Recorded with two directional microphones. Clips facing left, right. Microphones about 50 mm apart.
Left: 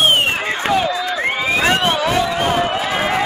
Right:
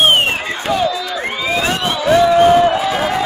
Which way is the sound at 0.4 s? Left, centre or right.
Left.